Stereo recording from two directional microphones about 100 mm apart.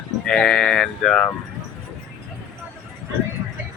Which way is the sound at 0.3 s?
10° left (ahead or behind).